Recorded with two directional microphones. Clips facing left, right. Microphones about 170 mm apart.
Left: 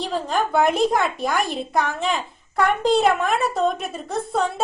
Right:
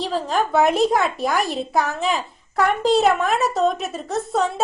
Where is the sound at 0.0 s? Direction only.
Centre (ahead or behind).